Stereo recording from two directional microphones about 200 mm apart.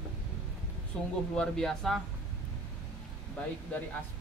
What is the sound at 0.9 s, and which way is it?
Speech, 5° left (ahead or behind).